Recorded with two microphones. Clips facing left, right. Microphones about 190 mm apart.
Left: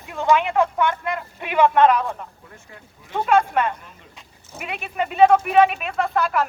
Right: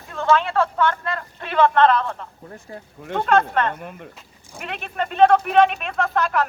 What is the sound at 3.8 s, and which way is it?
Speech, 60° right (ahead or behind).